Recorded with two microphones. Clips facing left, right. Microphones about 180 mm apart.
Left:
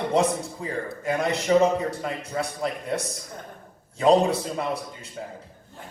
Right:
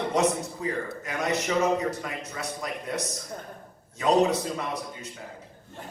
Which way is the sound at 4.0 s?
30° left (ahead or behind).